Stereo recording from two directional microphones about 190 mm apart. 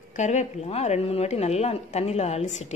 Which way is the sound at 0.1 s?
40° left (ahead or behind).